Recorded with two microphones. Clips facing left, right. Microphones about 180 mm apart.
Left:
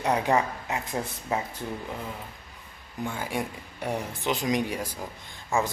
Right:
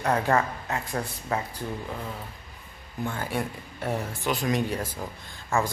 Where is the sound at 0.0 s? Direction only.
15° left (ahead or behind).